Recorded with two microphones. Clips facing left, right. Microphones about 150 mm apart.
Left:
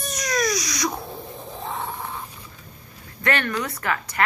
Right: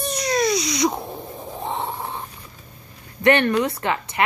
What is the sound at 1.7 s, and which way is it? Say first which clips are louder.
Grunt: right 3 dB; 30° right (ahead or behind).